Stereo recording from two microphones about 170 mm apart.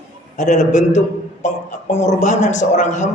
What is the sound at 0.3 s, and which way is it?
A man's voice, 45° left (ahead or behind).